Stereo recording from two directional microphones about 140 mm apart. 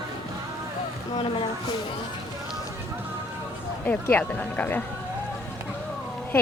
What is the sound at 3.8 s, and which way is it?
Speech, 10° left (ahead or behind).